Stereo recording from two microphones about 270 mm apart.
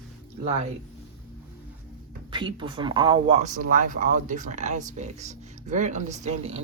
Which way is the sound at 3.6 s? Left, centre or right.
Right.